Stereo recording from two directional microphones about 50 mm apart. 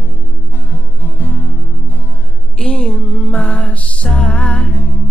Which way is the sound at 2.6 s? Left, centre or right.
Centre.